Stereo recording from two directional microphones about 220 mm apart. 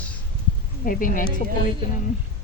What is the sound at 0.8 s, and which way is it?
Speech, 40° left (ahead or behind).